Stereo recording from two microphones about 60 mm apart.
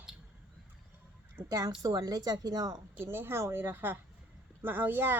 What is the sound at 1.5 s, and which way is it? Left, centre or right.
A woman's voice, right.